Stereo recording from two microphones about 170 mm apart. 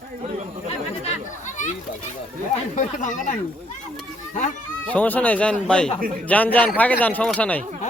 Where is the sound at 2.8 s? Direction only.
50° left (ahead or behind).